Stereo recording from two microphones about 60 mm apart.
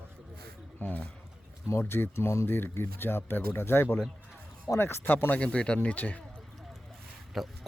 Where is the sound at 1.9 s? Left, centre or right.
Left.